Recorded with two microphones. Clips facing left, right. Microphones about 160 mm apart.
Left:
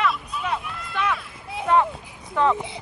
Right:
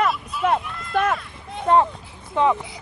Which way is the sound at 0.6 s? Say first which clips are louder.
Even; 5° left (ahead or behind).